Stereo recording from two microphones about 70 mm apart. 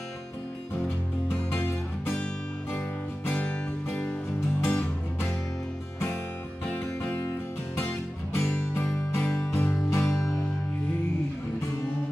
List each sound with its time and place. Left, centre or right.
1.5 s music: left
3.3 s music: left
4.6 s music: left
6.7 s music: left
8.4 s music: left
9.2 s music: left
10.0 s music: centre